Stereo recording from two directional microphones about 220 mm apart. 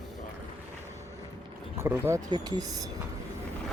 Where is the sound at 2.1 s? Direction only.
15° right (ahead or behind).